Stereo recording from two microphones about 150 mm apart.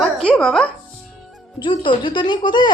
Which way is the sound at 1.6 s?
30° left (ahead or behind).